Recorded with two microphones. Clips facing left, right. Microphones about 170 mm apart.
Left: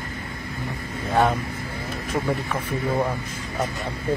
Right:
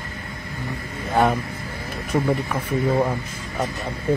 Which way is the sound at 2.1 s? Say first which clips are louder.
Right 4 dB; 15° right (ahead or behind).